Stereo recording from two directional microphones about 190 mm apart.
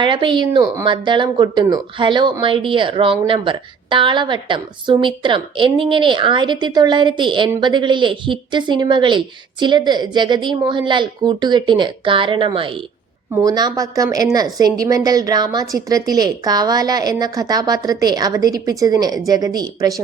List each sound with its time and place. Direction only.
0.0 s speech: 25° right (ahead or behind)